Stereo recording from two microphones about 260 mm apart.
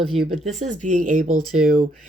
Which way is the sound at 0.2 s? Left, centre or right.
Right.